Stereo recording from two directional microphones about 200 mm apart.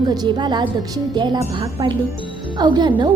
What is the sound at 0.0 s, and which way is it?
A woman's voice, 20° right (ahead or behind).